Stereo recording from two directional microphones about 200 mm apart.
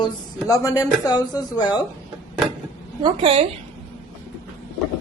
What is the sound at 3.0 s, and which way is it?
Speech, 25° right (ahead or behind).